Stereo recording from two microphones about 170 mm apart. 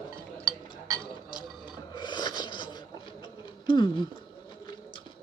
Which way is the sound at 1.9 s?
25° left (ahead or behind).